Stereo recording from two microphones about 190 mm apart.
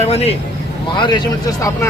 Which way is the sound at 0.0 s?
35° left (ahead or behind).